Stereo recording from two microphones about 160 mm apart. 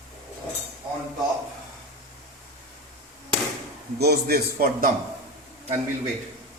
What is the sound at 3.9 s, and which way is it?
Speech, 85° right.